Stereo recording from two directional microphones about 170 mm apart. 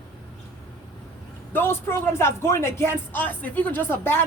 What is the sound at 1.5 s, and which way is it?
A man's voice, 15° left (ahead or behind).